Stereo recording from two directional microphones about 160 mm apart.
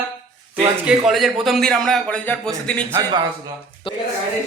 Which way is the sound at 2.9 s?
25° right (ahead or behind).